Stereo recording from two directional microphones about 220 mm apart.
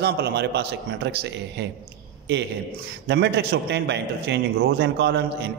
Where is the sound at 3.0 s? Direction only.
50° right (ahead or behind).